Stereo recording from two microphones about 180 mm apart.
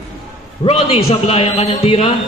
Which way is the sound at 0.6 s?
35° left (ahead or behind).